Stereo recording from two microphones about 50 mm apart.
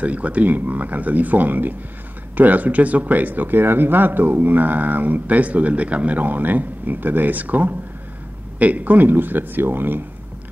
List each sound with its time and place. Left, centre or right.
0.0 s speech: right